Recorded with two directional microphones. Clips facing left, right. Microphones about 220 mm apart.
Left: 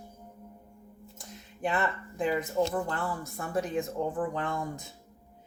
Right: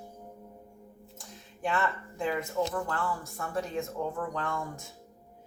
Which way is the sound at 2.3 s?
35° left (ahead or behind).